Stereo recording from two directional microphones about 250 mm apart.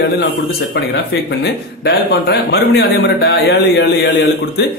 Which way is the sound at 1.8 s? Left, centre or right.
Left.